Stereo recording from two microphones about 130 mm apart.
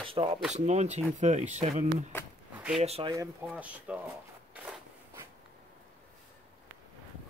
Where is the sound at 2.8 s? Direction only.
50° right (ahead or behind).